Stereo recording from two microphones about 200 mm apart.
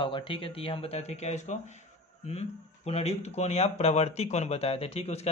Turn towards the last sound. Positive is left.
turn(degrees=30)  # may be behind; listen again after turning